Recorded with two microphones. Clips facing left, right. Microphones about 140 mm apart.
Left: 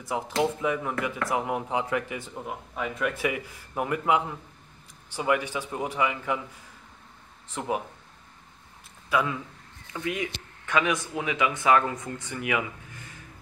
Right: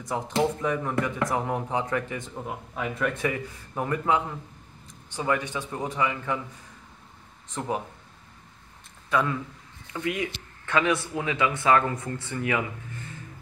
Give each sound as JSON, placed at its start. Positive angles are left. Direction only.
{"t": 0.4, "sound": "speech", "side_deg": 10}
{"t": 7.4, "sound": "speech", "side_deg": 10}
{"t": 9.1, "sound": "speech", "side_deg": 5}
{"t": 10.0, "sound": "speech", "side_deg": 20}